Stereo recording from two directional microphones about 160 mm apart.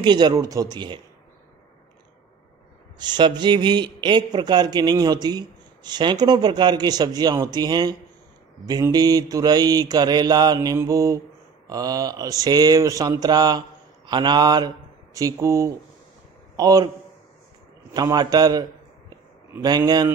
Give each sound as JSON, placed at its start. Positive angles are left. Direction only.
{"t": 0.0, "sound": "mantra", "side_deg": -25}
{"t": 3.0, "sound": "mantra", "side_deg": -30}
{"t": 17.9, "sound": "a man's voice", "side_deg": -25}